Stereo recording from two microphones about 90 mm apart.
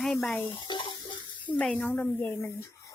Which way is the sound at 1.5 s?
5° left (ahead or behind).